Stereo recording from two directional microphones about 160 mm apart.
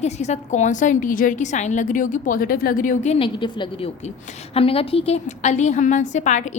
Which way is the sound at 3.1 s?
30° left (ahead or behind).